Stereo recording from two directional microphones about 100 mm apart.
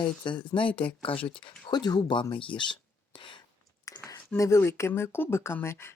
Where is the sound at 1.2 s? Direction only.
15° left (ahead or behind).